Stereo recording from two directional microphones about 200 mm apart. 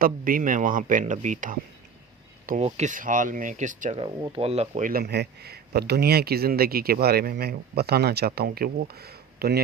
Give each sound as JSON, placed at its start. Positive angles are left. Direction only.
{"t": 0.0, "sound": "speech", "side_deg": -45}
{"t": 2.6, "sound": "speech", "side_deg": -35}
{"t": 4.0, "sound": "speech", "side_deg": -25}